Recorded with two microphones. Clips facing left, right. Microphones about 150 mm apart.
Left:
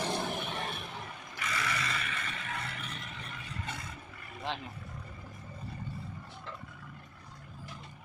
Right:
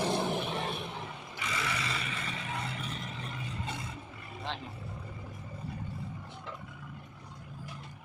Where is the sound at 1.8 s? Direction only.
25° right (ahead or behind).